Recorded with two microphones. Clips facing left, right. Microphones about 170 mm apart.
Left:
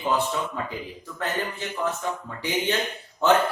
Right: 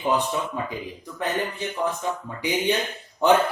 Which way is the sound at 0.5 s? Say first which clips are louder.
Right 2 dB; 15° right (ahead or behind).